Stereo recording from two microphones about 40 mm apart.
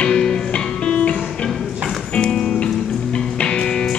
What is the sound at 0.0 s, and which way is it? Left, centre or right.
Music, left.